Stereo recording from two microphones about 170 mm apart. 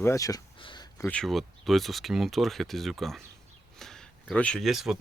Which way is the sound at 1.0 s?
5° left (ahead or behind).